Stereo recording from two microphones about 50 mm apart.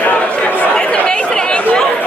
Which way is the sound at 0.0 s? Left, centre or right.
Left.